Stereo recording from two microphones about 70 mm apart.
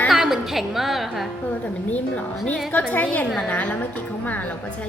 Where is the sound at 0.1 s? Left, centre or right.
Centre.